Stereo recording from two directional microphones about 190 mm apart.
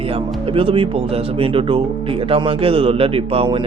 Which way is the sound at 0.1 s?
30° right (ahead or behind).